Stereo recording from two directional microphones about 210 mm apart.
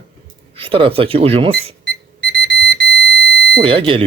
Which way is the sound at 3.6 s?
25° right (ahead or behind).